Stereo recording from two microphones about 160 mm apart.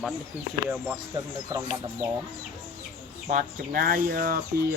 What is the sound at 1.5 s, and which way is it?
Speech, 25° right (ahead or behind).